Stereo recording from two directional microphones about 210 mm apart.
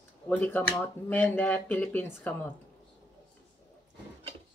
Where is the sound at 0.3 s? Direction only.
10° left (ahead or behind).